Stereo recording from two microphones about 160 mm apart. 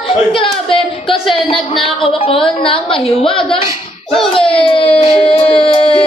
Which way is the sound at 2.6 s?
35° left (ahead or behind).